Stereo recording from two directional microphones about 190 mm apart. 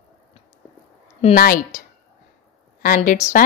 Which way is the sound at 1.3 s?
45° left (ahead or behind).